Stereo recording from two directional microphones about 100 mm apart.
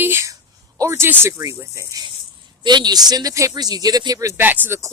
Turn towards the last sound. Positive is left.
turn(degrees=-25)  # may be behind; listen again after turning